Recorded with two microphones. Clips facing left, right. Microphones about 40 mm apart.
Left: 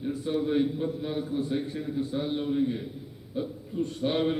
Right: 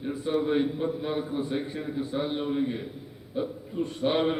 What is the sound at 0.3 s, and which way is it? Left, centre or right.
A man's voice, centre.